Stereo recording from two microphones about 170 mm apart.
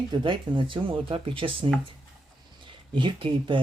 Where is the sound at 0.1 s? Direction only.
30° right (ahead or behind).